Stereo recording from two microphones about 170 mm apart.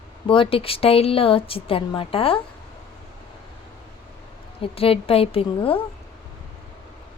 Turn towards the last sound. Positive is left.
turn(degrees=35)  # may be behind; listen again after turning